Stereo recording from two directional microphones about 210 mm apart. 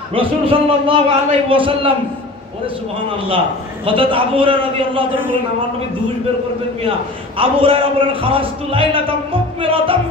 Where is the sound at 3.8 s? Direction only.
25° right (ahead or behind).